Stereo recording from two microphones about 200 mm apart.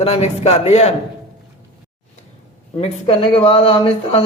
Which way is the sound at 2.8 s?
25° left (ahead or behind).